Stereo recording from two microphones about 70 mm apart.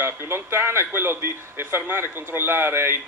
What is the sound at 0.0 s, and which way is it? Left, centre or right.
Speech, right.